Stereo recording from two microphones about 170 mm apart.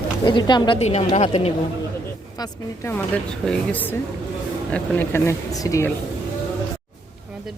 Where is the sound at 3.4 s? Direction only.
10° left (ahead or behind).